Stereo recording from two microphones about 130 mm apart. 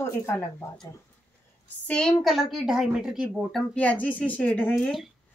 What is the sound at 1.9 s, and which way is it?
Speech, 5° left (ahead or behind).